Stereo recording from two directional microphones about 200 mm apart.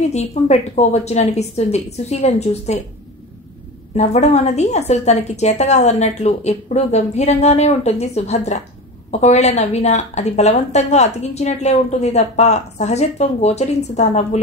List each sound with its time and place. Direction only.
0.1 s a woman's voice: 35° left (ahead or behind)
3.9 s a woman's voice: 35° left (ahead or behind)